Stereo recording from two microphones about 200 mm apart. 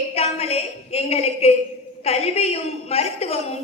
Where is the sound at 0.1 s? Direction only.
30° left (ahead or behind).